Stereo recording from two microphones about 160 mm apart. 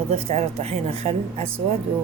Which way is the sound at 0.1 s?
40° right (ahead or behind).